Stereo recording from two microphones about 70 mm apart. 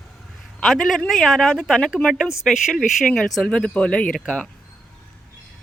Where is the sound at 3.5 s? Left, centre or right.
Centre.